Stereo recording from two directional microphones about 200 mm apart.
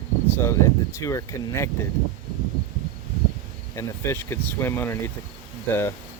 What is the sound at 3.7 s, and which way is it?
Speech, 10° left (ahead or behind).